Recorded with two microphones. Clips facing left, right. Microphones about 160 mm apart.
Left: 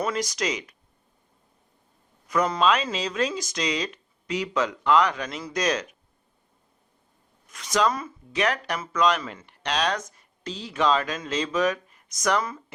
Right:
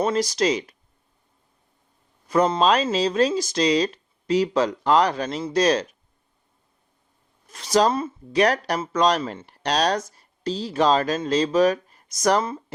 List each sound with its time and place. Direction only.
0.0 s speech: 30° right (ahead or behind)
2.2 s speech: 30° right (ahead or behind)
7.4 s speech: 30° right (ahead or behind)